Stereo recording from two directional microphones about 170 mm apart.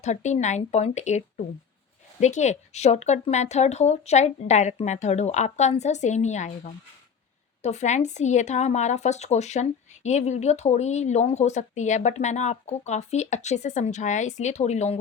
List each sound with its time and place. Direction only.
0.0 s speech: 40° left (ahead or behind)
2.2 s speech: 45° left (ahead or behind)
7.6 s speech: 40° left (ahead or behind)